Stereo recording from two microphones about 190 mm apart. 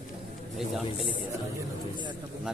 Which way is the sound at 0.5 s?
Centre (ahead or behind).